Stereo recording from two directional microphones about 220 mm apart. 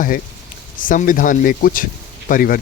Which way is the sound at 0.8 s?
40° left (ahead or behind).